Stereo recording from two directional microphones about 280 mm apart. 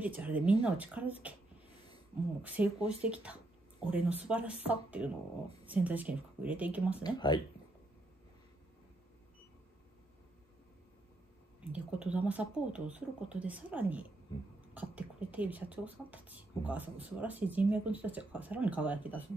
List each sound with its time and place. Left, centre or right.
0.0 s speech: centre
2.4 s speech: centre
7.2 s speech: centre
11.6 s speech: centre